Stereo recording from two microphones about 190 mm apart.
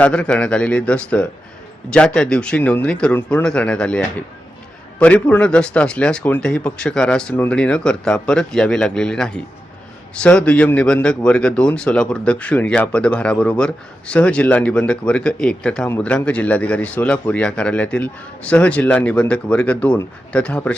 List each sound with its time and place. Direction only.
0.0 s a man's voice: 5° left (ahead or behind)